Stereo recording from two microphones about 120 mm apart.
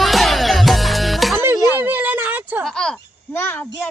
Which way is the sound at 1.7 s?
15° right (ahead or behind).